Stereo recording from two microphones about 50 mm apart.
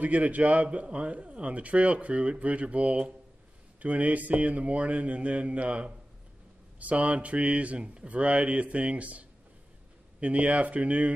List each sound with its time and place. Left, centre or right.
0.0 s a man's voice: right
10.2 s a man's voice: right